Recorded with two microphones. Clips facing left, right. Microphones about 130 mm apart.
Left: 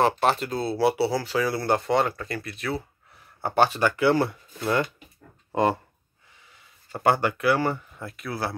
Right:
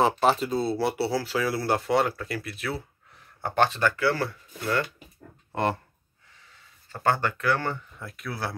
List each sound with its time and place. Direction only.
0.0 s speech: centre (ahead or behind)
3.4 s speech: 5° left (ahead or behind)
6.9 s speech: 15° left (ahead or behind)